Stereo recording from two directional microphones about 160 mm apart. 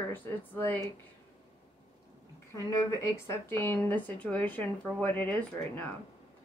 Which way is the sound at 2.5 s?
15° left (ahead or behind).